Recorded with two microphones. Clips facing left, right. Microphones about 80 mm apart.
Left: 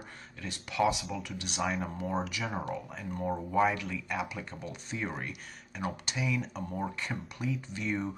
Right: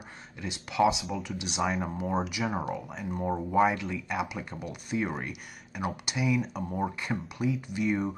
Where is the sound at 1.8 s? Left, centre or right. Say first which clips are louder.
Right 3 dB; centre.